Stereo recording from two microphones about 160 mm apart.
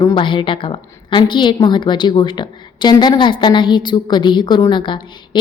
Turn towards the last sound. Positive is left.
turn(degrees=30)  # may be behind; listen again after turning